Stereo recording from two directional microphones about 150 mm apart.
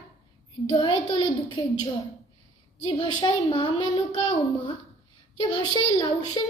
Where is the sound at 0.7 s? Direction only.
30° left (ahead or behind).